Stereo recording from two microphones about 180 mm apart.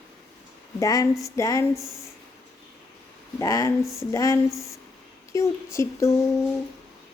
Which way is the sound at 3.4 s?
20° left (ahead or behind).